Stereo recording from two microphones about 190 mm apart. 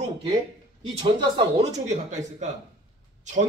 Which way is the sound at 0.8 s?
25° right (ahead or behind).